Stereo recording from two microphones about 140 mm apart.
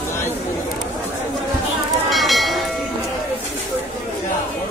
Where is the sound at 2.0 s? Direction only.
Centre (ahead or behind).